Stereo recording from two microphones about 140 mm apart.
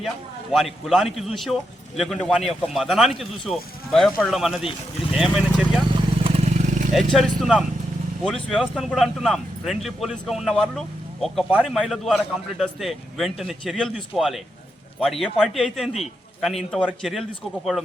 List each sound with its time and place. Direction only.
0.5 s speech: centre (ahead or behind)
6.2 s vehicle: 55° right (ahead or behind)
6.9 s speech: centre (ahead or behind)